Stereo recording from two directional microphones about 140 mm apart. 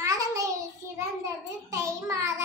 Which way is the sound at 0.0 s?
20° right (ahead or behind).